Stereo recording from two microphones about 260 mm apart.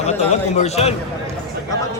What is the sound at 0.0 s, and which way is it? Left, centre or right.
Speech, left.